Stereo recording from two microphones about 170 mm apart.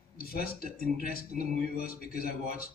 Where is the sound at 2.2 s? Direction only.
60° left (ahead or behind).